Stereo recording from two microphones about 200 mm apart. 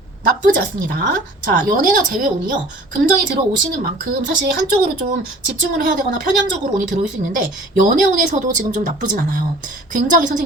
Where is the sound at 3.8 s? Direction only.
45° right (ahead or behind).